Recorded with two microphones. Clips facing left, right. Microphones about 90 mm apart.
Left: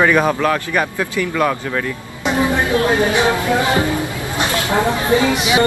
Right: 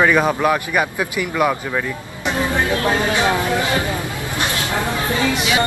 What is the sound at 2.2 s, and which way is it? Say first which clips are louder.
Speech: left 3 dB; 20° left (ahead or behind).